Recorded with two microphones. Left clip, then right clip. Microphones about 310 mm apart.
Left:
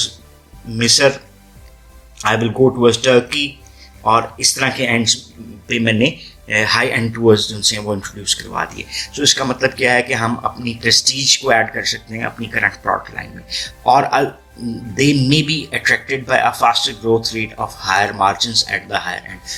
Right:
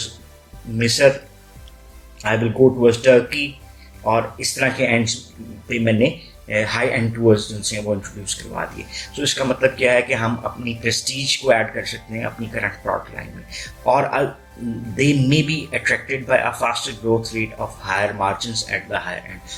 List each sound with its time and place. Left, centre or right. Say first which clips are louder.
0.8 s speech: left 2 dB; left
2.8 s speech: left 2 dB; left